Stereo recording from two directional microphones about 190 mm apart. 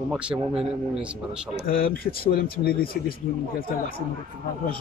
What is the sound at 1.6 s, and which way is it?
Speech, 50° left (ahead or behind).